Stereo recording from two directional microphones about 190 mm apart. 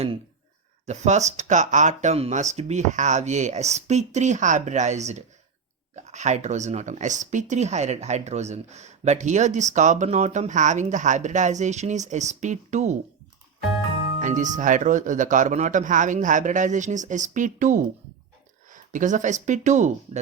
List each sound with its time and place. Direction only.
0.9 s speech: 35° right (ahead or behind)
14.2 s speech: 40° right (ahead or behind)